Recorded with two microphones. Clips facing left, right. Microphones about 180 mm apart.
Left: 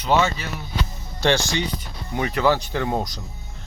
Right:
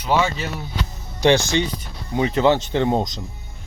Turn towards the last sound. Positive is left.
turn(degrees=-20)  # may be behind; listen again after turning